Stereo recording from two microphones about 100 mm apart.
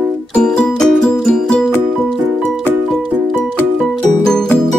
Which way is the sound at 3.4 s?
Centre (ahead or behind).